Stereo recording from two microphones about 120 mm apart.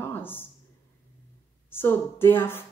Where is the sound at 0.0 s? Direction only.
15° left (ahead or behind).